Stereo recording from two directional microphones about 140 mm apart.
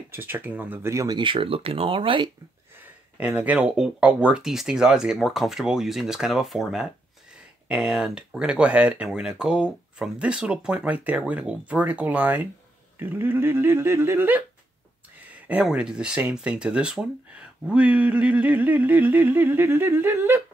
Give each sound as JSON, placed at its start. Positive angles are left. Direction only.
{"t": 0.1, "sound": "speech", "side_deg": -15}
{"t": 1.1, "sound": "speech", "side_deg": -35}
{"t": 3.2, "sound": "speech", "side_deg": -10}